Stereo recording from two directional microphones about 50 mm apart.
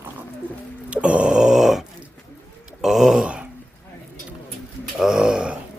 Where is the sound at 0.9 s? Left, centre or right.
Right.